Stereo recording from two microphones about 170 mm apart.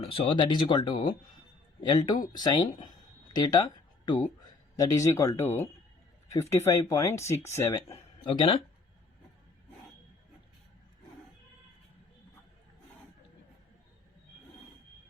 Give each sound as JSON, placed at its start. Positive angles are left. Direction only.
{"t": 0.0, "sound": "speech", "side_deg": 35}
{"t": 6.6, "sound": "speech", "side_deg": 20}